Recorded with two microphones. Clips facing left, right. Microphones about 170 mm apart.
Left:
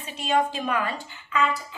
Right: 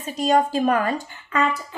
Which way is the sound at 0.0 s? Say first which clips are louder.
Right 5 dB; 40° right (ahead or behind).